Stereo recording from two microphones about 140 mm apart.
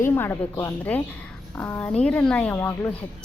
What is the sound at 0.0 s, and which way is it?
A woman's voice, 15° left (ahead or behind).